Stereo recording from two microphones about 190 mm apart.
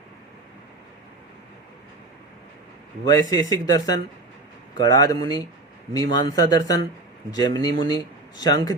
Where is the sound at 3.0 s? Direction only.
20° left (ahead or behind).